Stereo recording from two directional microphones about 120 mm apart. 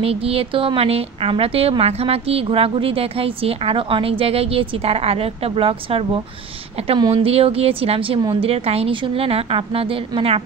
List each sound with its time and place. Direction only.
0.0 s a woman's voice: 55° right (ahead or behind)